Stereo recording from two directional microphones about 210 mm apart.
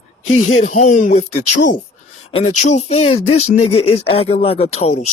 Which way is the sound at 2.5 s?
35° left (ahead or behind).